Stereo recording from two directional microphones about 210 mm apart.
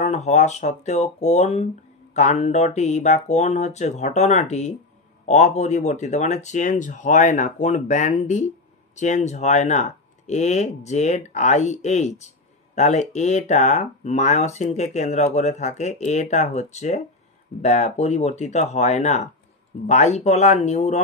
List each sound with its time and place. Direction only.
0.0 s speech: 35° left (ahead or behind)